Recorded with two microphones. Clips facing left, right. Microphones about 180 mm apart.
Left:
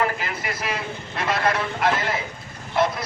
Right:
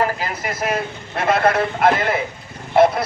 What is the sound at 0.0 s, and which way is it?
A man's voice, 40° right (ahead or behind).